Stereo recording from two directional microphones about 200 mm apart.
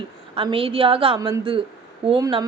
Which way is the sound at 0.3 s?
25° right (ahead or behind).